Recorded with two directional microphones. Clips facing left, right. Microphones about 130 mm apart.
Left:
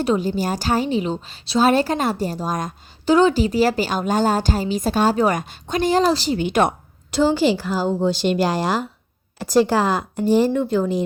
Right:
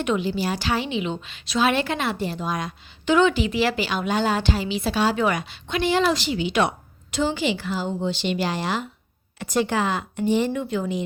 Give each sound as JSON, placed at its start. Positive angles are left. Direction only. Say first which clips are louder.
{"t": 0.0, "sound": "a woman's voice", "louder": "left 3 dB", "side_deg": 40}